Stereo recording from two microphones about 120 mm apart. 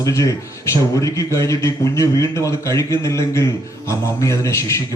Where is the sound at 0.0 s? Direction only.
25° left (ahead or behind).